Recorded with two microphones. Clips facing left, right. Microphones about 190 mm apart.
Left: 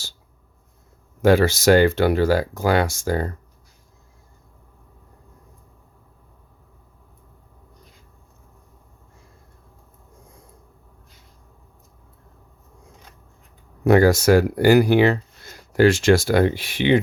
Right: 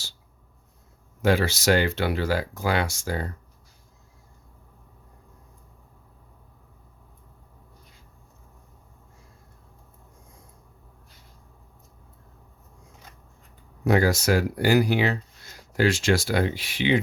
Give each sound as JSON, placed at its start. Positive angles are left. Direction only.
{"t": 1.2, "sound": "speech", "side_deg": 45}
{"t": 13.8, "sound": "speech", "side_deg": 55}